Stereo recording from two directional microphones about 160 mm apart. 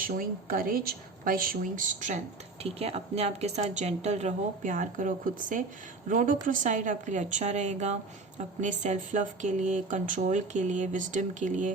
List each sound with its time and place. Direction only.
0.0 s speech: 60° right (ahead or behind)
2.6 s speech: 40° right (ahead or behind)